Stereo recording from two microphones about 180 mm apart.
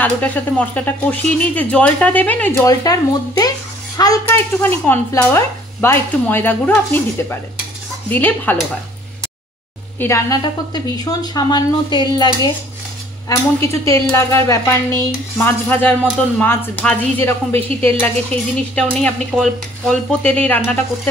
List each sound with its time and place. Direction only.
0.0 s speech: 10° left (ahead or behind)
9.9 s a woman's voice: 15° left (ahead or behind)